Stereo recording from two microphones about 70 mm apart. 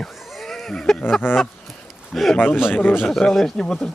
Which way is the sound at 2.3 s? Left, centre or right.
Left.